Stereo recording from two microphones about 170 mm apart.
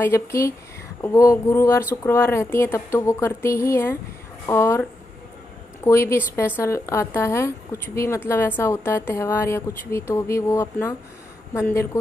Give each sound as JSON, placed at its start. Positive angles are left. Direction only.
{"t": 0.0, "sound": "a woman's voice", "side_deg": 15}
{"t": 5.9, "sound": "a woman's voice", "side_deg": 15}